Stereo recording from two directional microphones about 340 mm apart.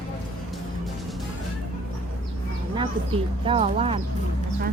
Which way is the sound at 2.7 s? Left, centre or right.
Centre.